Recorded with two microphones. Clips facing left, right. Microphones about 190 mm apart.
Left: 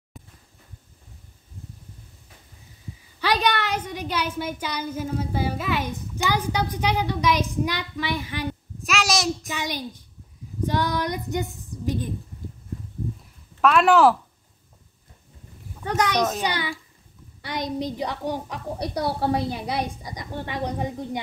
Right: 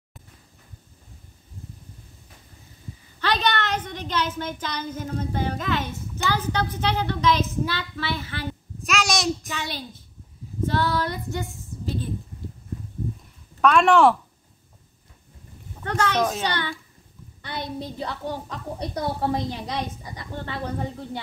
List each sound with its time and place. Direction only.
3.2 s a woman's voice: 10° left (ahead or behind)
8.8 s a child's voice: centre (ahead or behind)
9.5 s a woman's voice: 15° left (ahead or behind)
10.6 s child singing: 15° left (ahead or behind)
13.6 s speech: centre (ahead or behind)
15.8 s a woman's voice: 15° left (ahead or behind)